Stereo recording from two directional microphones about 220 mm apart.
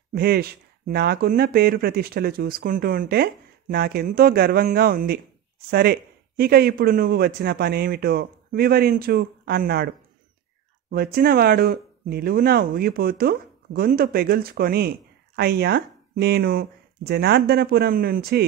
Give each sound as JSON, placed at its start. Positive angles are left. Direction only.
{"t": 0.1, "sound": "speech", "side_deg": -45}
{"t": 10.9, "sound": "speech", "side_deg": -40}